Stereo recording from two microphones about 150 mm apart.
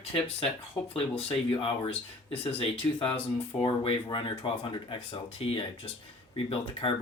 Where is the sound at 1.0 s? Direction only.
40° left (ahead or behind).